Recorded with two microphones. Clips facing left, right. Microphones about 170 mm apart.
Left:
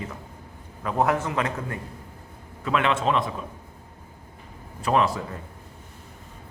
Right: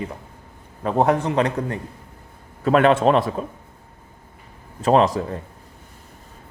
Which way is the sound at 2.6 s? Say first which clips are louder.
Right 8 dB; 45° right (ahead or behind).